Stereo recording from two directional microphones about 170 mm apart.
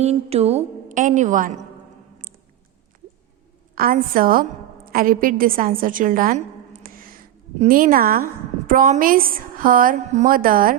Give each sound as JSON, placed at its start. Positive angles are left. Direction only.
{"t": 0.0, "sound": "a woman's voice", "side_deg": -40}
{"t": 3.8, "sound": "a woman's voice", "side_deg": -55}
{"t": 6.8, "sound": "a sound", "side_deg": -55}
{"t": 7.7, "sound": "a woman's voice", "side_deg": -55}